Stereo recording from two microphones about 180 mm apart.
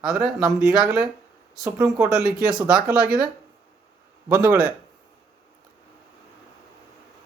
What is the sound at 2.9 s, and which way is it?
Speech, 55° right (ahead or behind).